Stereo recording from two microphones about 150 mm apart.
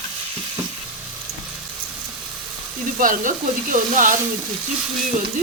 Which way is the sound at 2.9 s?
65° right (ahead or behind).